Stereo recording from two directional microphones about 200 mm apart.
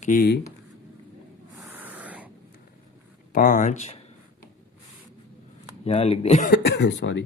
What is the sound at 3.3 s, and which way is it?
Speech, 45° left (ahead or behind).